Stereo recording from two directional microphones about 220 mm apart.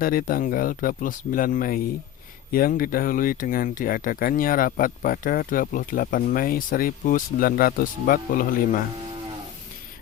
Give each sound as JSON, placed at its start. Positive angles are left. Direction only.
{"t": 0.0, "sound": "speech", "side_deg": 40}